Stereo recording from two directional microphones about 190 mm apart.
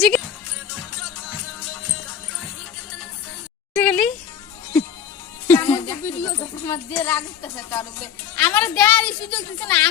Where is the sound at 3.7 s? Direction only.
5° left (ahead or behind).